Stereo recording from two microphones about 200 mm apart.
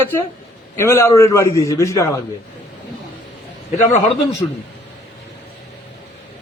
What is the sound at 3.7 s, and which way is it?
Speech, 35° left (ahead or behind).